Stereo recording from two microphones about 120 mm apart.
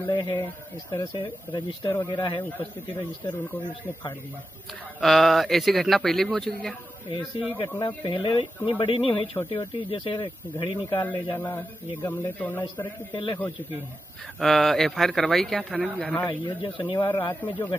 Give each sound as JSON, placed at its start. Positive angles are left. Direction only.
{"t": 0.1, "sound": "speech", "side_deg": 40}
{"t": 5.0, "sound": "speech", "side_deg": 0}
{"t": 7.1, "sound": "speech", "side_deg": 45}
{"t": 11.3, "sound": "speech", "side_deg": 15}
{"t": 12.7, "sound": "speech", "side_deg": 40}
{"t": 14.4, "sound": "speech", "side_deg": 0}
{"t": 16.3, "sound": "speech", "side_deg": 40}